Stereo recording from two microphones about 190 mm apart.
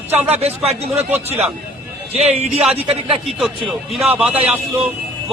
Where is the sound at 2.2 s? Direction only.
35° right (ahead or behind).